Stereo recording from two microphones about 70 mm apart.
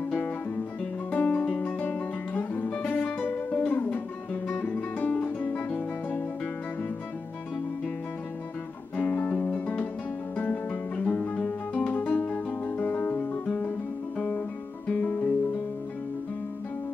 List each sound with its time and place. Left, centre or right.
1.1 s music: left
8.9 s guitar: left
10.3 s music: left
14.9 s guitar: centre